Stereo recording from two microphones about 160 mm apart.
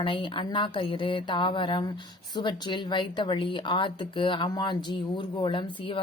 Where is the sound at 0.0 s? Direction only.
30° left (ahead or behind).